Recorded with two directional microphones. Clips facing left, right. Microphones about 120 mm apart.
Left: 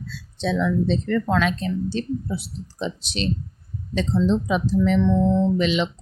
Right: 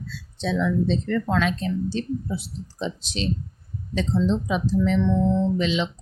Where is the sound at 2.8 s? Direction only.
70° left (ahead or behind).